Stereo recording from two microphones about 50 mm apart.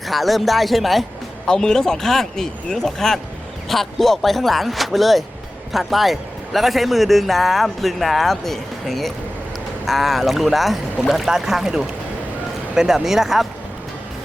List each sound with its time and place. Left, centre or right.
0.1 s speech: centre
1.5 s speech: centre